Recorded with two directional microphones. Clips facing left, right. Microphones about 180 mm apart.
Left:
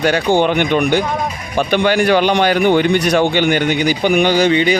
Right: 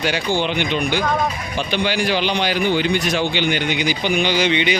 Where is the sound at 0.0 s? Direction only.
50° left (ahead or behind).